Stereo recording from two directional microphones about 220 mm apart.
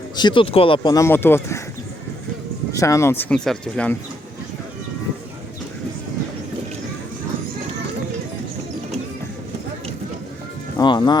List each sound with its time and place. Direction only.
0.2 s speech: 20° left (ahead or behind)
2.7 s speech: 15° left (ahead or behind)
10.8 s speech: 20° left (ahead or behind)